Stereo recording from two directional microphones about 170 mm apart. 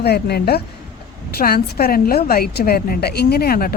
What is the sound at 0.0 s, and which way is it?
A woman's voice, 70° left (ahead or behind).